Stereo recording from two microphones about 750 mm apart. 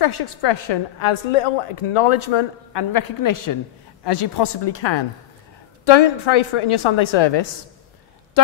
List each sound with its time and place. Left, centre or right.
0.0 s speech: left